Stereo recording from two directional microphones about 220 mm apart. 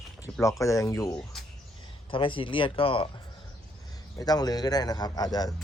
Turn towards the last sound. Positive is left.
turn(degrees=15)  # may be behind; listen again after turning